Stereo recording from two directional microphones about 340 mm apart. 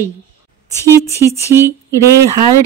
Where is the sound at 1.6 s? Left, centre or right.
Centre.